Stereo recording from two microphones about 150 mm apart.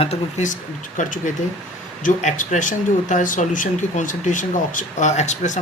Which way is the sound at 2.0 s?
60° left (ahead or behind).